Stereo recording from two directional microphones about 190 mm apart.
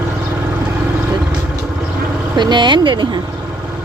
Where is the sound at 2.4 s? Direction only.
25° right (ahead or behind).